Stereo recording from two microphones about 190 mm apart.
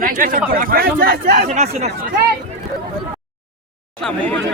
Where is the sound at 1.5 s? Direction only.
35° right (ahead or behind).